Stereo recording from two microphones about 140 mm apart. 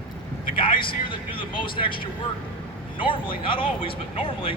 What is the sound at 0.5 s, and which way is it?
Speech, 40° left (ahead or behind).